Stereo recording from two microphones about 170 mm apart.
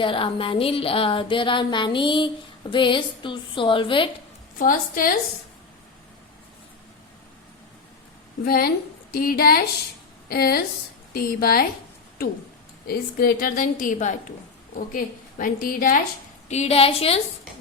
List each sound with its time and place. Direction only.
0.0 s music: 30° left (ahead or behind)
4.5 s a woman's voice: 55° left (ahead or behind)
8.4 s a woman's voice: 65° left (ahead or behind)
12.9 s a woman's voice: 65° left (ahead or behind)
16.5 s a woman's voice: 40° left (ahead or behind)